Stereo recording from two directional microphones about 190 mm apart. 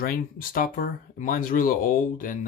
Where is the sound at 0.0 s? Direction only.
50° left (ahead or behind).